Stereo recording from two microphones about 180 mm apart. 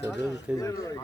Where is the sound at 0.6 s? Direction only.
15° left (ahead or behind).